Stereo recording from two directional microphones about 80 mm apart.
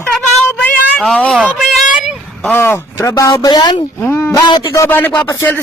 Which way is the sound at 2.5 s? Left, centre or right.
Left.